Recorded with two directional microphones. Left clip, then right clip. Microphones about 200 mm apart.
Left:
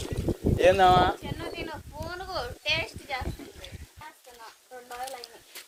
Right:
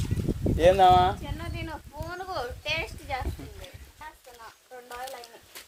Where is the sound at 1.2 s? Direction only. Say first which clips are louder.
Left 2 dB; 50° right (ahead or behind).